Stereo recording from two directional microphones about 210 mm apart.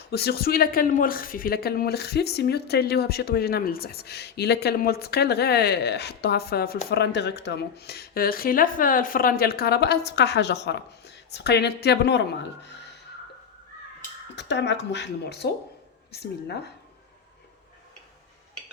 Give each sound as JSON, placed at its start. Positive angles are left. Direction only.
{"t": 0.1, "sound": "speech", "side_deg": 50}
{"t": 14.3, "sound": "speech", "side_deg": 55}